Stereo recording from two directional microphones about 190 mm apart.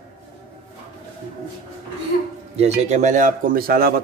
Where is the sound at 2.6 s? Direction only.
35° right (ahead or behind); by 4.0 s 55° right (ahead or behind).